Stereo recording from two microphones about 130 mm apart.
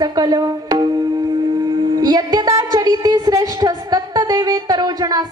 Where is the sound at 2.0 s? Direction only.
30° right (ahead or behind).